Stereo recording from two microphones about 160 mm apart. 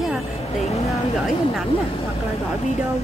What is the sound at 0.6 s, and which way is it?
Speech, 40° left (ahead or behind).